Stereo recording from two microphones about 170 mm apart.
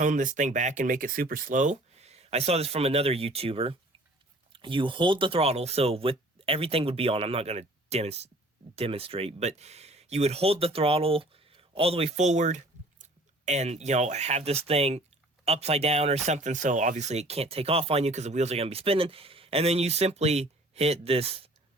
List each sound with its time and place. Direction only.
0.0 s speech: 50° right (ahead or behind)